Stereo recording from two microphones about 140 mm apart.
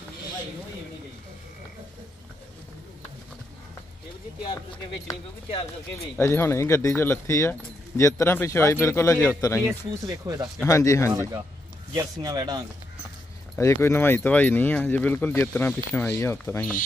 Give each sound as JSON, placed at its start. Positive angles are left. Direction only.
{"t": 6.1, "sound": "speech", "side_deg": 15}
{"t": 9.7, "sound": "speech", "side_deg": -25}
{"t": 10.7, "sound": "speech", "side_deg": 25}
{"t": 11.1, "sound": "speech", "side_deg": -20}
{"t": 13.6, "sound": "speech", "side_deg": 20}